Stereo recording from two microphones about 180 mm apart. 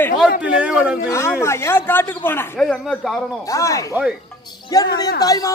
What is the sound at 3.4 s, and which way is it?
A man's voice, 20° left (ahead or behind).